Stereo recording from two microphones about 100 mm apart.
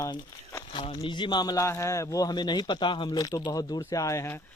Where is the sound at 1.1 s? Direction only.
50° left (ahead or behind).